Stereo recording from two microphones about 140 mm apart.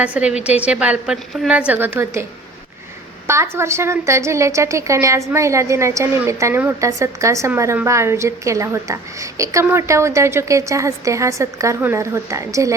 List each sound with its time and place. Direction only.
0.0 s a woman's voice: 10° right (ahead or behind)
3.2 s a woman's voice: 20° right (ahead or behind)